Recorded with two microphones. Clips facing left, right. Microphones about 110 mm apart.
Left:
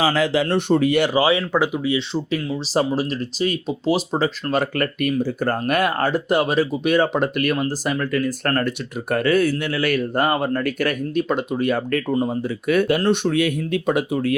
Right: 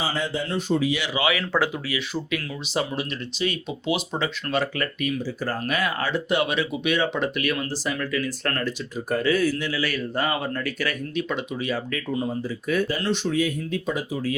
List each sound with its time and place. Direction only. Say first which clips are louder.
0.0 s speech: left 8 dB; 90° left; by 1.2 s 50° left (ahead or behind)
1.2 s speech: left 6 dB; 30° left (ahead or behind)
1.5 s speech: left 5 dB; 15° left (ahead or behind)
2.7 s speech: left 6 dB; 35° left (ahead or behind)
9.0 s speech: left 4 dB; 60° left (ahead or behind)
13.0 s speech: left 5 dB; 55° left (ahead or behind)